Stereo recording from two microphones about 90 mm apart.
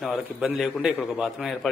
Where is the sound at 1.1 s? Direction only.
10° right (ahead or behind).